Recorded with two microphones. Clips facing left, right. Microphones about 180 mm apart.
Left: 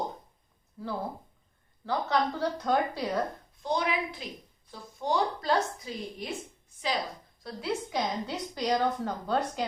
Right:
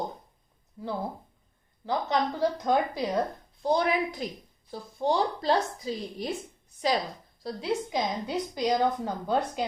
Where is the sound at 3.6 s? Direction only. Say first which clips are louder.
Right 4 dB; 45° right (ahead or behind).